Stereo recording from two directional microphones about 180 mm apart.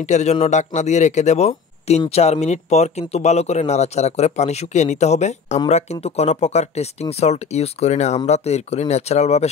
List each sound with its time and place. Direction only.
0.0 s speech: 40° left (ahead or behind)